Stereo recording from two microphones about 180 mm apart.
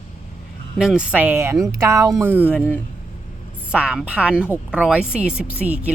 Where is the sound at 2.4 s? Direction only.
10° left (ahead or behind).